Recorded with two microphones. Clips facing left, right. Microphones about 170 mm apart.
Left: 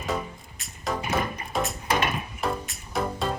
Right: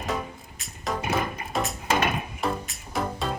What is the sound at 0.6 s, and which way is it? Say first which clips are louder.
Music: even; centre (ahead or behind).